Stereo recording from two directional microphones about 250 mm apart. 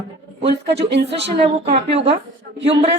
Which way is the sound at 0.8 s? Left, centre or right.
Right.